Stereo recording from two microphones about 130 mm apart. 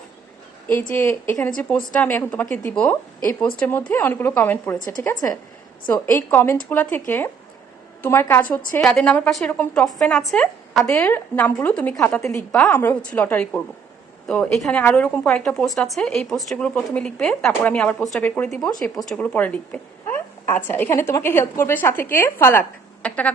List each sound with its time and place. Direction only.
0.7 s a woman's voice: 15° left (ahead or behind)
4.9 s a woman's voice: 30° left (ahead or behind)
5.9 s a woman's voice: 15° left (ahead or behind)
8.0 s a woman's voice: 20° left (ahead or behind)